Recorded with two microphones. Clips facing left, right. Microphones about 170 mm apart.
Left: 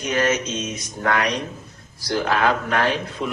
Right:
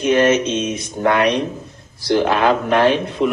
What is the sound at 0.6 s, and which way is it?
Speech, 60° right (ahead or behind).